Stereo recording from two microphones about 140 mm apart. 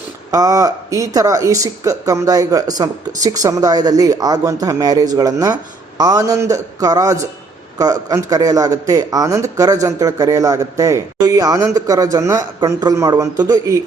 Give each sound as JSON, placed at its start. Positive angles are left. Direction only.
{"t": 0.3, "sound": "speech", "side_deg": -25}